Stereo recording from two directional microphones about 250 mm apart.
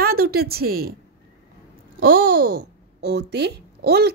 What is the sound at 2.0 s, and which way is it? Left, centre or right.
Speech, right.